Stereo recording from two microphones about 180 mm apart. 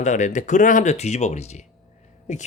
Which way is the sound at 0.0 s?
40° left (ahead or behind).